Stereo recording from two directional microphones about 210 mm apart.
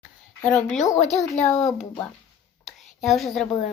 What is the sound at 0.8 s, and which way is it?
Speech, 35° left (ahead or behind).